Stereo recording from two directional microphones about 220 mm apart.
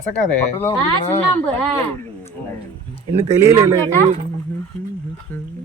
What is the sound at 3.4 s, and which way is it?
Speech, 10° right (ahead or behind).